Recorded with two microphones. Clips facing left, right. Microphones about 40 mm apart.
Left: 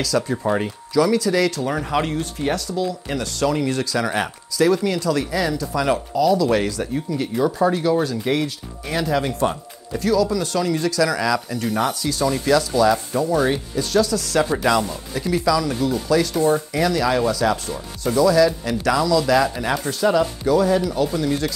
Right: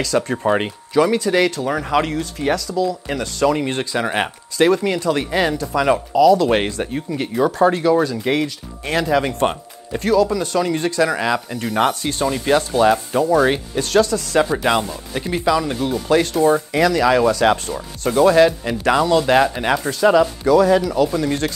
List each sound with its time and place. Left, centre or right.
0.0 s speech: right
2.7 s speech: right
3.1 s speech: right
5.8 s speech: right
7.2 s speech: right
11.7 s speech: right
14.1 s speech: right
15.8 s speech: right
19.9 s speech: right